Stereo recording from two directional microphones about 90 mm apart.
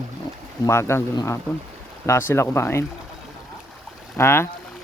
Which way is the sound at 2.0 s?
30° left (ahead or behind).